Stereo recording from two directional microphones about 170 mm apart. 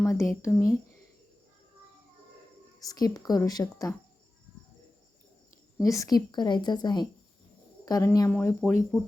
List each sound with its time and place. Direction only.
0.0 s speech: 15° left (ahead or behind)
2.8 s a woman's voice: 20° left (ahead or behind)
5.8 s a woman's voice: 20° left (ahead or behind)
8.3 s speech: 10° left (ahead or behind)